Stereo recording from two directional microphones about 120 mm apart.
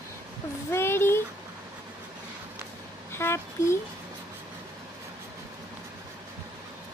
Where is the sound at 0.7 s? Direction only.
20° left (ahead or behind).